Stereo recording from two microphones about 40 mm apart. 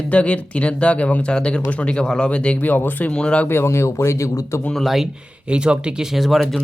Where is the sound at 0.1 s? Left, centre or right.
Left.